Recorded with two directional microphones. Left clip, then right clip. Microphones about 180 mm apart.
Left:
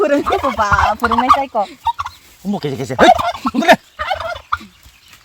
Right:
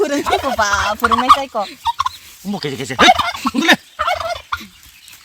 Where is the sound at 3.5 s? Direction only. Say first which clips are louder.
Left 3 dB; 60° left (ahead or behind).